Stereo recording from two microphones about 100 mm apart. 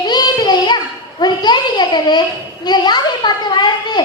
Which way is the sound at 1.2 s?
45° left (ahead or behind).